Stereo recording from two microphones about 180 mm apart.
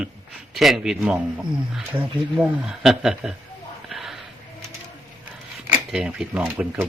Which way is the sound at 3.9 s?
Centre (ahead or behind).